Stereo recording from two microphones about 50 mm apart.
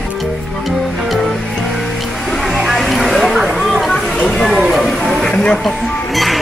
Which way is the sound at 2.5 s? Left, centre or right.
Centre.